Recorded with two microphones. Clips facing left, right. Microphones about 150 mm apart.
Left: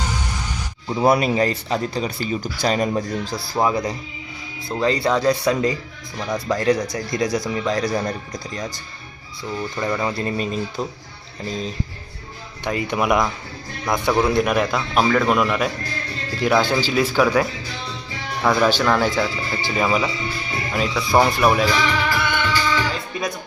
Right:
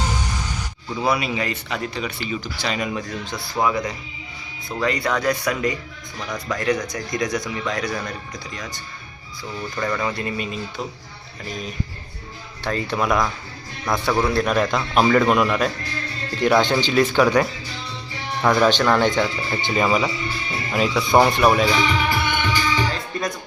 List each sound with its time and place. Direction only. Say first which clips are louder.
0.9 s speech: left 5 dB; 45° left (ahead or behind)
9.8 s speech: left 1 dB; 25° left (ahead or behind)
12.6 s a man's voice: left 1 dB; 15° left (ahead or behind); by 21.7 s centre (ahead or behind)
21.7 s music: even; 20° right (ahead or behind)